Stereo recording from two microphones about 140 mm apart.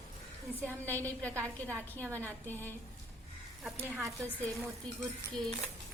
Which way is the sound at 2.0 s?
15° right (ahead or behind).